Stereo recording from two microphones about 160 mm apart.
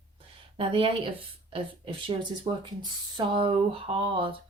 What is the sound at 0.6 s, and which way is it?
A woman's voice, 35° right (ahead or behind).